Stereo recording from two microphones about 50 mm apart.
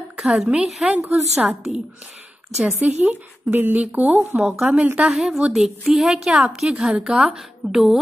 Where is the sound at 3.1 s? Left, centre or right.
Right.